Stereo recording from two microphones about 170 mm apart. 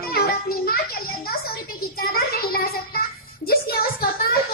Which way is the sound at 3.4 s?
65° left (ahead or behind).